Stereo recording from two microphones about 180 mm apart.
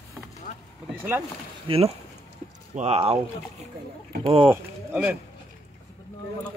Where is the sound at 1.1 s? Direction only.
10° right (ahead or behind).